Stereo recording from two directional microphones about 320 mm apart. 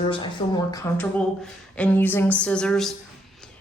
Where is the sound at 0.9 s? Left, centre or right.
Centre.